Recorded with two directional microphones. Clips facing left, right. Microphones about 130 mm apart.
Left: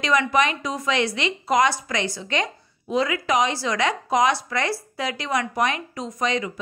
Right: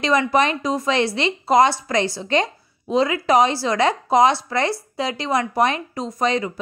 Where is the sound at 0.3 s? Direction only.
35° right (ahead or behind).